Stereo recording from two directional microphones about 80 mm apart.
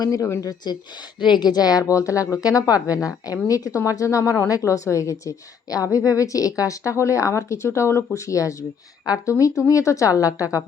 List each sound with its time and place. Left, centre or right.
0.0 s a woman's voice: left
1.2 s a woman's voice: left